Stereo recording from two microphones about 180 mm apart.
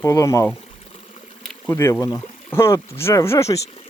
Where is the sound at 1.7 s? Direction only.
15° left (ahead or behind).